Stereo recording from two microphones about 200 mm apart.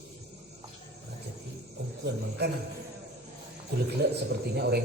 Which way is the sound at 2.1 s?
55° right (ahead or behind).